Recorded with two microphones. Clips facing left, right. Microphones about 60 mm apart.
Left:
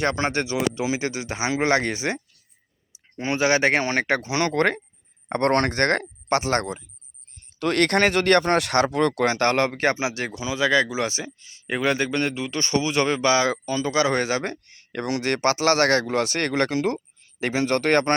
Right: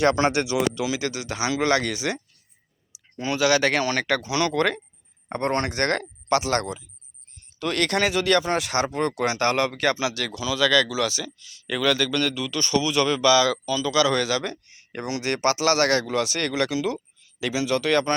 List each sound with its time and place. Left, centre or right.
0.0 s speech: left
5.3 s speech: left